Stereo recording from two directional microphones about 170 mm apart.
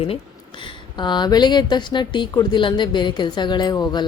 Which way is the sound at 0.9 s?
25° left (ahead or behind).